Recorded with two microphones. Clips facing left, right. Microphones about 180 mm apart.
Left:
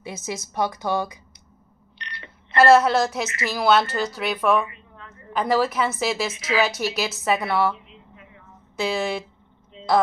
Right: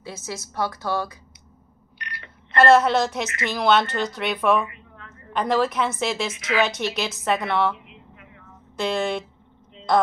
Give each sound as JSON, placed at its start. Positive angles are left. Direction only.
{"t": 0.0, "sound": "a woman's voice", "side_deg": 15}
{"t": 2.0, "sound": "telephone", "side_deg": -10}
{"t": 2.5, "sound": "a woman's voice", "side_deg": 5}
{"t": 4.6, "sound": "a sound", "side_deg": 30}
{"t": 5.3, "sound": "a woman's voice", "side_deg": 5}
{"t": 8.7, "sound": "a woman's voice", "side_deg": 5}